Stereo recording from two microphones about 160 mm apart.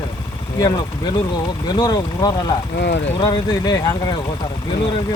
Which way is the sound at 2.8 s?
90° left.